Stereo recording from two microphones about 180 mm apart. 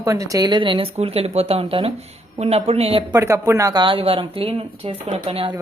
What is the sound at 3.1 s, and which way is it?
Speech, 15° right (ahead or behind).